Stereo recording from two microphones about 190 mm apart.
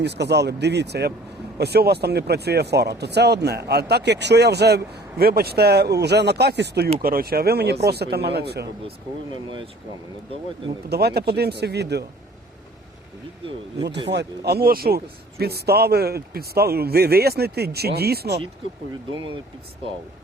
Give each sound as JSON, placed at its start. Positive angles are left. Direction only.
{"t": 0.0, "sound": "speech", "side_deg": -60}
{"t": 10.8, "sound": "speech", "side_deg": -55}
{"t": 14.1, "sound": "speech", "side_deg": -60}
{"t": 19.1, "sound": "speech", "side_deg": -25}